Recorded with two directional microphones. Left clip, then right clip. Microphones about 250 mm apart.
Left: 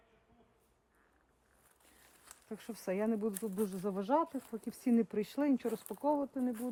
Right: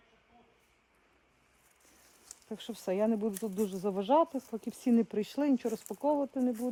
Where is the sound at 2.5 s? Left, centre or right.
Centre.